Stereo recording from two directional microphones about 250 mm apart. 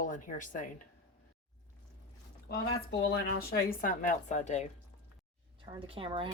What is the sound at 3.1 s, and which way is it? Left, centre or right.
A woman's voice, left.